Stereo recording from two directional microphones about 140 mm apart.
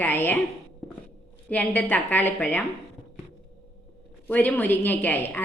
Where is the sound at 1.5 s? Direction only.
10° left (ahead or behind).